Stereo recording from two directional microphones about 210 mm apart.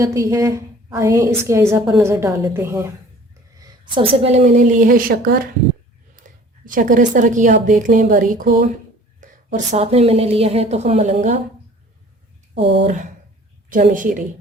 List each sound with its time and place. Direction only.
0.0 s a woman's voice: 15° right (ahead or behind); by 11.3 s 35° right (ahead or behind)
12.8 s a woman's voice: 35° right (ahead or behind)